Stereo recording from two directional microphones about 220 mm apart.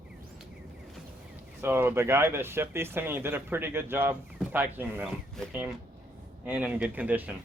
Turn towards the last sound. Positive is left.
turn(degrees=-5)  # may be behind; listen again after turning